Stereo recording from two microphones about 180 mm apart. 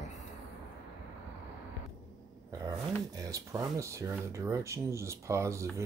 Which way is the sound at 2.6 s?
20° right (ahead or behind).